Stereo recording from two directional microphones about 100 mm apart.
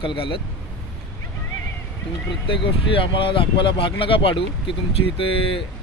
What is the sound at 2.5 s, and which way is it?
Speech, 60° left (ahead or behind).